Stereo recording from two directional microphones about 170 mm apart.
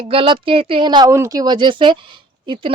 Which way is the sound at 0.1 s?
30° right (ahead or behind).